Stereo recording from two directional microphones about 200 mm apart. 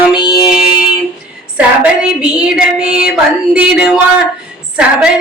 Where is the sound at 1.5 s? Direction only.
5° right (ahead or behind).